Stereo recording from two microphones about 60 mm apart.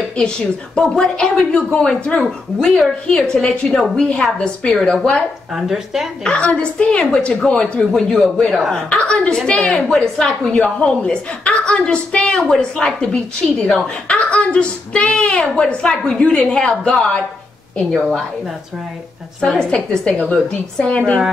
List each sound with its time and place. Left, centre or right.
0.7 s a woman's voice: centre
5.5 s speech: centre
6.2 s a woman's voice: centre
7.4 s a woman's voice: centre
8.9 s a woman's voice: centre
19.6 s a woman's voice: centre